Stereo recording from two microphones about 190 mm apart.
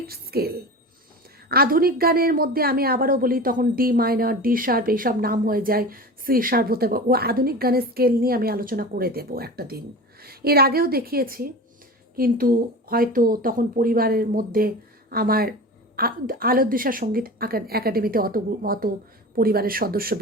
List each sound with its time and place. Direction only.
0.1 s a woman's voice: 55° right (ahead or behind)